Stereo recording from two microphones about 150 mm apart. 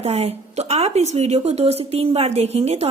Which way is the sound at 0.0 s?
45° right (ahead or behind).